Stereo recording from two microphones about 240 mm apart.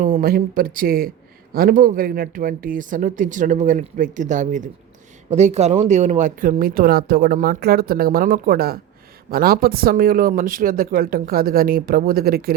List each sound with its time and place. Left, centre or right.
0.0 s speech: right